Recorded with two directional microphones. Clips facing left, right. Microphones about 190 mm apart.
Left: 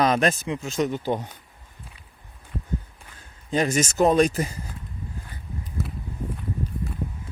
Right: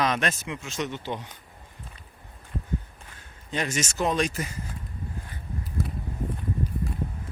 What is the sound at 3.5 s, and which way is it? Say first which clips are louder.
Speech: left 7 dB; 35° left (ahead or behind).